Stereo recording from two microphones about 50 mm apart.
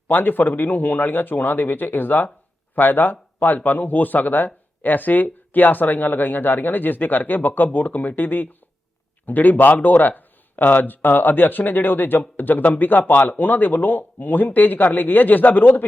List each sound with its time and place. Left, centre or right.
0.1 s speech: left